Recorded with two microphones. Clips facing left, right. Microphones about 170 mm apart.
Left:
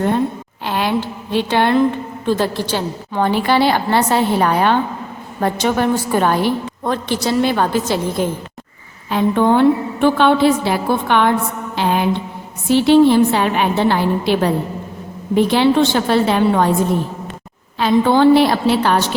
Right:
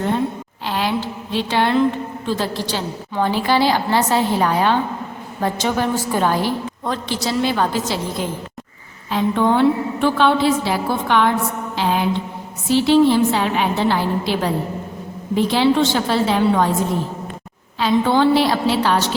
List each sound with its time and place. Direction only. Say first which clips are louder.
0.6 s a woman's voice: left 3 dB; 55° left (ahead or behind)
11.8 s mantra: left 2 dB; 55° left (ahead or behind)
12.6 s a woman's voice: left 3 dB; 55° left (ahead or behind)
17.7 s a woman's voice: left 3 dB; 50° left (ahead or behind)